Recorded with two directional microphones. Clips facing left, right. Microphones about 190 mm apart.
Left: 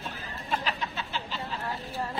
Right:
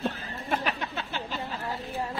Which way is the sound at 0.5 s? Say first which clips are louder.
Right 2 dB; 55° right (ahead or behind).